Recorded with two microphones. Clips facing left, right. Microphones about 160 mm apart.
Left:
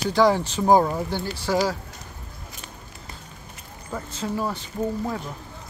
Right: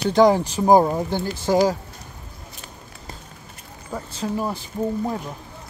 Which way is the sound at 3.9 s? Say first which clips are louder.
Right 2 dB; 15° right (ahead or behind).